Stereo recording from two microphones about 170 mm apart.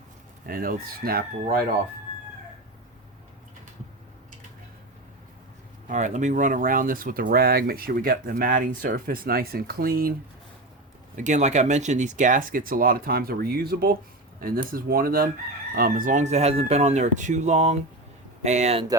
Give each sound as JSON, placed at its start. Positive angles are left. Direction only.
{"t": 0.4, "sound": "speech", "side_deg": -60}
{"t": 5.9, "sound": "speech", "side_deg": -45}
{"t": 11.2, "sound": "speech", "side_deg": -45}